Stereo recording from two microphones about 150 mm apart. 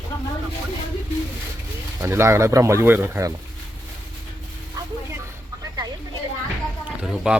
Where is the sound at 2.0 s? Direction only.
20° right (ahead or behind).